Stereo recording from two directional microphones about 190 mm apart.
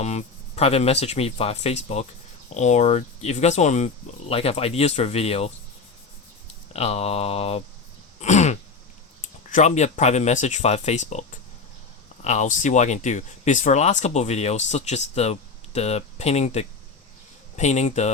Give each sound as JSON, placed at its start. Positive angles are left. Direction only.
{"t": 0.0, "sound": "speech", "side_deg": 35}
{"t": 6.7, "sound": "speech", "side_deg": 35}